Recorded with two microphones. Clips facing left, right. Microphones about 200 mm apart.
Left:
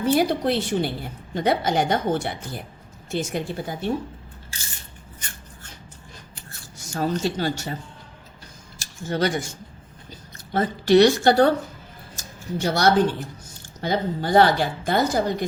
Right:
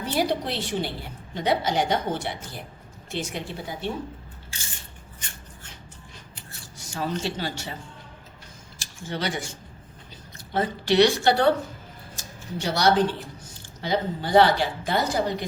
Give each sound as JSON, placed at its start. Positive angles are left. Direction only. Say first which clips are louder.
{"t": 0.0, "sound": "a woman's voice", "louder": "left 5 dB", "side_deg": 50}
{"t": 6.5, "sound": "speech", "louder": "left 4 dB", "side_deg": 45}
{"t": 8.8, "sound": "speech", "louder": "left 7 dB", "side_deg": 45}
{"t": 10.5, "sound": "a woman's voice", "louder": "left 6 dB", "side_deg": 45}